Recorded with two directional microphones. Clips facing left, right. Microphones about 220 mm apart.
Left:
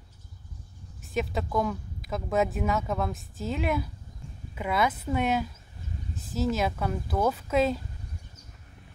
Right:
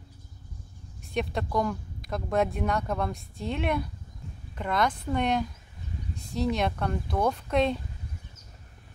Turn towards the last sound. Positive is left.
turn(degrees=5)  # may be behind; listen again after turning